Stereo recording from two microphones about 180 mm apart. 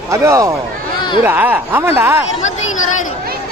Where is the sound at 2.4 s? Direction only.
90° left.